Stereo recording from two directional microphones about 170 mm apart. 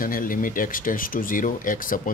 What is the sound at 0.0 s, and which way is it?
Speech, 55° left (ahead or behind).